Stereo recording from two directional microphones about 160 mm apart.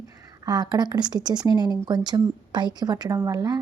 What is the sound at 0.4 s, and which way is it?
A woman's voice, 25° right (ahead or behind).